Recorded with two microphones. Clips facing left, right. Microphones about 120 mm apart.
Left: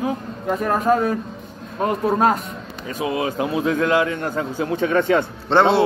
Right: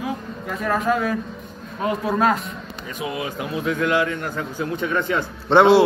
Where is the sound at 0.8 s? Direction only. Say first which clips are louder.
Left 2 dB; 40° left (ahead or behind).